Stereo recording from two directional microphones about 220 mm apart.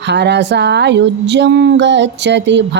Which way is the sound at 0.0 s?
50° right (ahead or behind).